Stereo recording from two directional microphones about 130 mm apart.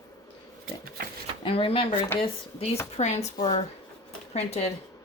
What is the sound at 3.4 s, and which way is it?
Speech, 45° left (ahead or behind).